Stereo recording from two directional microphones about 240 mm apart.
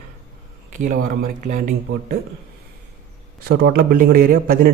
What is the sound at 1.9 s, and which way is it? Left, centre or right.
Speech, right.